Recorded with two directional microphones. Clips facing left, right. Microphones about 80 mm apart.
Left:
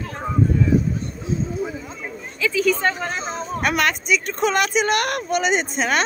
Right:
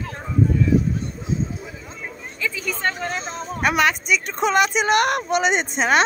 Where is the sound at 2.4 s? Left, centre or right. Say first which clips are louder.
Left 6 dB; centre.